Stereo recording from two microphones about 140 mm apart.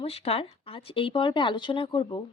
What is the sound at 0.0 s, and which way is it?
Speech, 45° left (ahead or behind).